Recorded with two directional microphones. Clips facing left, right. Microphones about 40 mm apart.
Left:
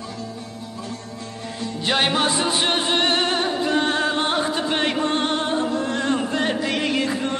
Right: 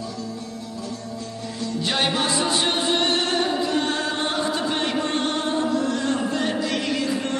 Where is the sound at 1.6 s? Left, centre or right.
Left.